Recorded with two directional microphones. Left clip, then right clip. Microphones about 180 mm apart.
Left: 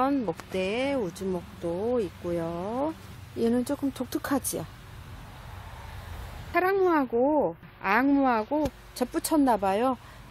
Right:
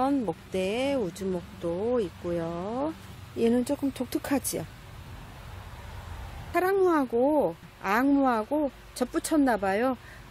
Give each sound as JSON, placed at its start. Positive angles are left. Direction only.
{"t": 0.0, "sound": "a woman's voice", "side_deg": 0}
{"t": 6.5, "sound": "a woman's voice", "side_deg": 0}